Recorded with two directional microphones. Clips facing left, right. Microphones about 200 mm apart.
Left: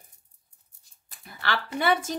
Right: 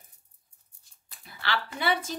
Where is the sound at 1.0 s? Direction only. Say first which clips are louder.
Left 3 dB; 50° left (ahead or behind).